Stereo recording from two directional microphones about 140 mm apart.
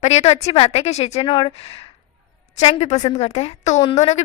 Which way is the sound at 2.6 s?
50° left (ahead or behind).